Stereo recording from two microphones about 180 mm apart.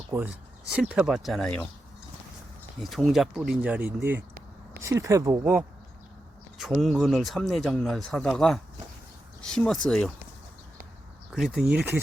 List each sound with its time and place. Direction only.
0.1 s speech: 10° right (ahead or behind); by 1.6 s 5° left (ahead or behind)
2.8 s speech: centre (ahead or behind); by 5.4 s 20° right (ahead or behind)
5.4 s speech: 5° right (ahead or behind)
11.3 s speech: centre (ahead or behind)